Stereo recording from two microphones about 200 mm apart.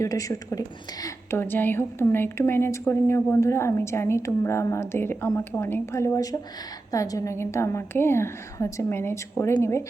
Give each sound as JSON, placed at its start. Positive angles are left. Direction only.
{"t": 0.0, "sound": "a woman's voice", "side_deg": 15}